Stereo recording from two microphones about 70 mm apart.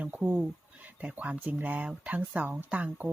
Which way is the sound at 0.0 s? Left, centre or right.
Right.